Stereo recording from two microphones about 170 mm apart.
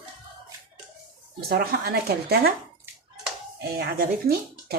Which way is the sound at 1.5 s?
70° right (ahead or behind).